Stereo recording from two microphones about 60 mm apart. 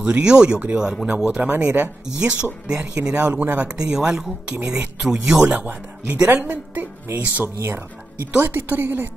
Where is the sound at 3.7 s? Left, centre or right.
Centre; by 7.4 s right.